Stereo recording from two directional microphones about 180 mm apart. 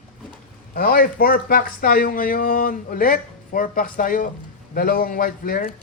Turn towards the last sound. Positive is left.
turn(degrees=55)  # may be behind; listen again after turning